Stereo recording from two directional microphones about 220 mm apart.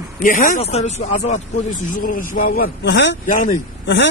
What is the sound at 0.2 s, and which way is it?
Speech, 35° left (ahead or behind).